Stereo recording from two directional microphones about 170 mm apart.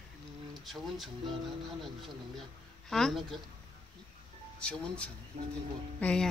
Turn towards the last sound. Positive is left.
turn(degrees=5)  # may be behind; listen again after turning